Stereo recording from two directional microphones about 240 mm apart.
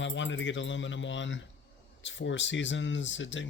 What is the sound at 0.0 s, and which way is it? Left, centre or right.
Speech, left.